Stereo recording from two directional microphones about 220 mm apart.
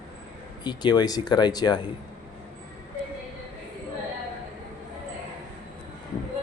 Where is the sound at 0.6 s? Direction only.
20° left (ahead or behind).